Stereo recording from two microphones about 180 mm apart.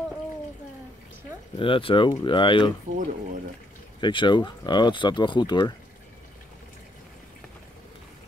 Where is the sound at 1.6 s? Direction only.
30° left (ahead or behind).